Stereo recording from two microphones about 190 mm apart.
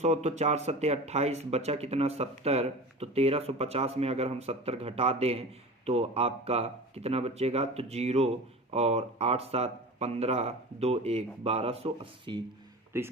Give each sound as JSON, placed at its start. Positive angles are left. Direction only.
{"t": 0.0, "sound": "speech", "side_deg": -35}
{"t": 12.9, "sound": "speech", "side_deg": -10}